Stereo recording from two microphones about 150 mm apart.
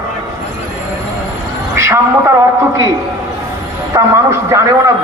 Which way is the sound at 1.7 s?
20° right (ahead or behind).